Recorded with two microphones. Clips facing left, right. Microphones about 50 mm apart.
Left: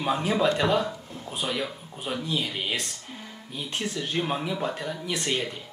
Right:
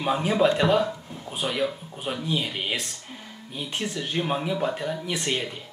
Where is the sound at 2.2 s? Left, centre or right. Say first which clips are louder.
Right 2 dB; centre.